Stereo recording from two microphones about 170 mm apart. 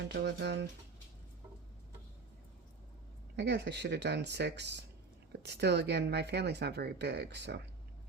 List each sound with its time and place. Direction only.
0.1 s speech: 80° right
3.3 s speech: 80° right
5.4 s speech: 75° right (ahead or behind)